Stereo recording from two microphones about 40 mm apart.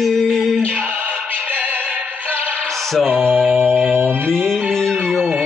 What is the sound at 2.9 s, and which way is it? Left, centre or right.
Music, centre.